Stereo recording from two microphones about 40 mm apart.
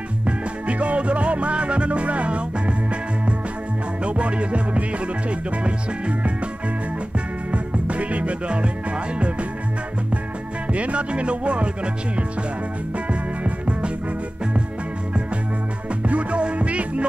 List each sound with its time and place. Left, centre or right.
0.7 s music: right
7.5 s music: right
10.7 s music: right
15.9 s music: right